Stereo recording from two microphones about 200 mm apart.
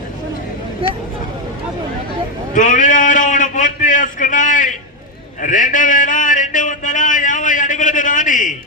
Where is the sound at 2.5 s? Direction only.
40° left (ahead or behind).